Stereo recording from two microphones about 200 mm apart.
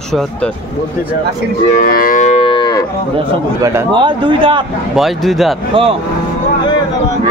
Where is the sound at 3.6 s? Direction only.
20° right (ahead or behind).